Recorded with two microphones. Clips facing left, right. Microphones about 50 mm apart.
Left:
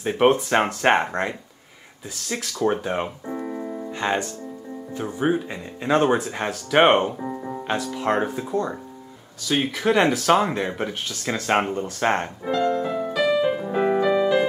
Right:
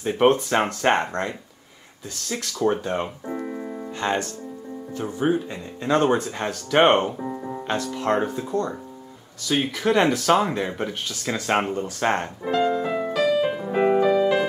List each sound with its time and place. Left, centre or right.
0.0 s speech: centre
2.3 s speech: centre
3.3 s music: centre
3.9 s speech: left
12.8 s music: right
14.0 s music: left